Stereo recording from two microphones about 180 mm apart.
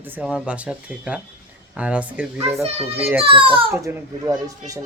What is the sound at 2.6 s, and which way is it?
A child's voice, 35° right (ahead or behind).